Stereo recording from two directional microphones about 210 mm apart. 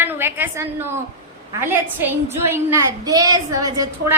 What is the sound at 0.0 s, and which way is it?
A woman's voice, 10° right (ahead or behind).